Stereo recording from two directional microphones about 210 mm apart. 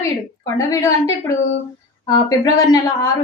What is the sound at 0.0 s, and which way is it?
A woman's voice, 15° left (ahead or behind).